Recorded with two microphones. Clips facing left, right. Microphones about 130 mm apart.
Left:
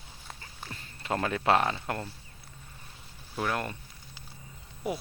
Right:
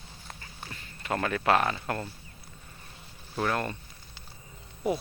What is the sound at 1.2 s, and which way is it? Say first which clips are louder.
Speech: even; 25° left (ahead or behind).